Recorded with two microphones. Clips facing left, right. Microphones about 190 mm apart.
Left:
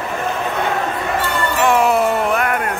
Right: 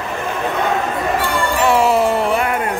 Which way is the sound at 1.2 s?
10° right (ahead or behind).